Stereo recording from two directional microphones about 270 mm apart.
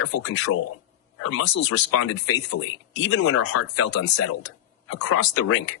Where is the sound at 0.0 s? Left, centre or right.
Left.